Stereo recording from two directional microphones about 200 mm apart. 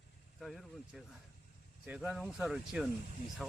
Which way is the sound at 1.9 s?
5° right (ahead or behind).